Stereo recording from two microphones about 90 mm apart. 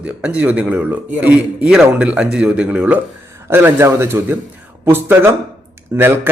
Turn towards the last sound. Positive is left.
turn(degrees=-30)  # may be behind; listen again after turning